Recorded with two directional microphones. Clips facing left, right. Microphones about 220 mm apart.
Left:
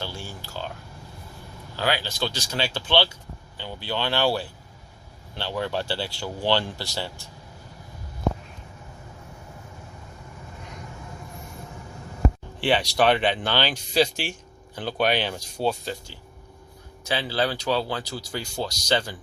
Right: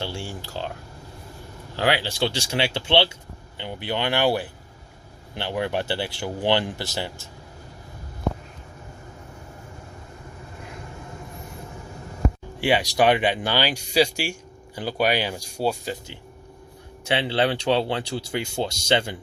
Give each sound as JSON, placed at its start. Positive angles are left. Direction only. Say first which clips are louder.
{"t": 0.0, "sound": "speech", "louder": "right 4 dB", "side_deg": -30}
{"t": 2.0, "sound": "speech", "louder": "right 4 dB", "side_deg": -30}
{"t": 12.5, "sound": "speech", "louder": "right 2 dB", "side_deg": -10}
{"t": 17.1, "sound": "speech", "louder": "right 3 dB", "side_deg": -25}